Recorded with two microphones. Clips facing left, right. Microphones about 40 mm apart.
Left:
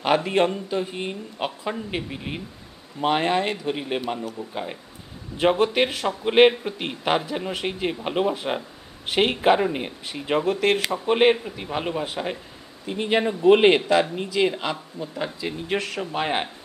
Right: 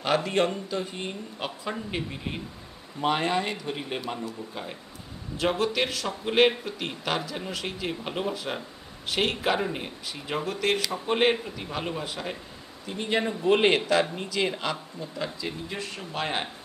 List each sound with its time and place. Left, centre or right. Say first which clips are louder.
0.0 s a man's voice: left 4 dB; left
5.6 s a man's voice: left 5 dB; left
10.9 s a man's voice: left 6 dB; centre
13.2 s a man's voice: left 7 dB; centre
15.7 s speech: left 13 dB; left
16.1 s a man's voice: left 4 dB; centre